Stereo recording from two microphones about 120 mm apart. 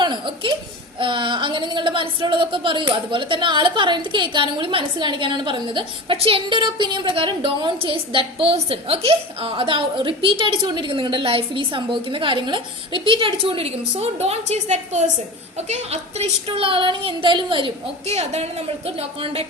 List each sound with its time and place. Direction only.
0.0 s a sound: 40° right (ahead or behind)
0.9 s a woman's voice: 45° right (ahead or behind)
18.0 s a woman's voice: 65° right (ahead or behind)